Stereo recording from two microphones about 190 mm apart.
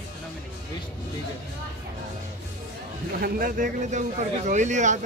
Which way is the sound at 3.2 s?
50° right (ahead or behind).